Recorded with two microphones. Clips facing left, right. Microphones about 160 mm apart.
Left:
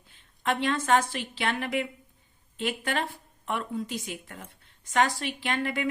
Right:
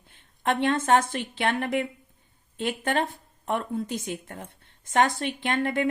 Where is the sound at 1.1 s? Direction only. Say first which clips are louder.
Right 4 dB; 55° right (ahead or behind).